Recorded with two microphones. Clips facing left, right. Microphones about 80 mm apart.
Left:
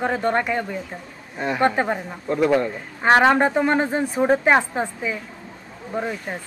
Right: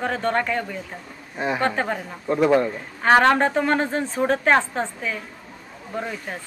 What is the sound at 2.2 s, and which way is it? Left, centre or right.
Speech, centre.